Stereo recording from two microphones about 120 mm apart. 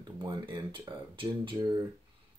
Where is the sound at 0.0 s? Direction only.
35° right (ahead or behind).